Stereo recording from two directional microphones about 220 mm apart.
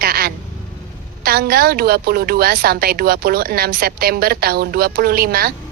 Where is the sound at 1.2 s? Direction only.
45° right (ahead or behind).